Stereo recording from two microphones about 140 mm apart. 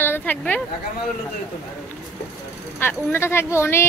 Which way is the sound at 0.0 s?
15° left (ahead or behind).